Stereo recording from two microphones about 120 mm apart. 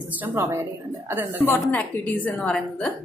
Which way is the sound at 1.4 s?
15° left (ahead or behind).